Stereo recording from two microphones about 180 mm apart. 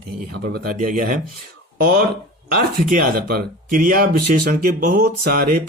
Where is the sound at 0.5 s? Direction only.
55° right (ahead or behind).